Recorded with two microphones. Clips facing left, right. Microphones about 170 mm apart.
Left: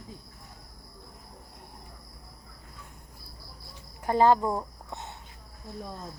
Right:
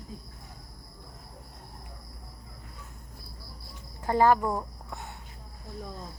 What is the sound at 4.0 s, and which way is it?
Speech, 20° left (ahead or behind).